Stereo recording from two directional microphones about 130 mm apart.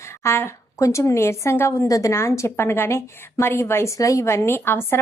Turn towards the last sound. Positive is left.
turn(degrees=15)  # may be behind; listen again after turning